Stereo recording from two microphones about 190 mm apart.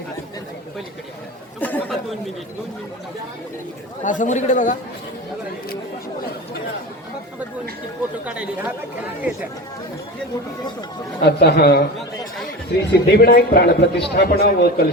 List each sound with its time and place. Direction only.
1.6 s chatter: 5° left (ahead or behind)
4.0 s a man's voice: 40° left (ahead or behind)
8.2 s speech: 5° right (ahead or behind)
11.2 s a man's voice: 60° left (ahead or behind)
12.9 s a man's voice: 55° left (ahead or behind)